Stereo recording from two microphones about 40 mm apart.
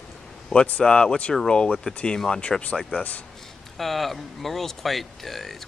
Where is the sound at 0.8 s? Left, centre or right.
Centre.